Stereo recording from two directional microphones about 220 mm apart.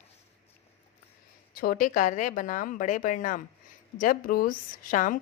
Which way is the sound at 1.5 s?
40° left (ahead or behind).